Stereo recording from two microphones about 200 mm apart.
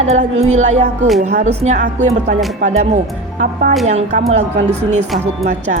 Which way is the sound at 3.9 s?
35° right (ahead or behind).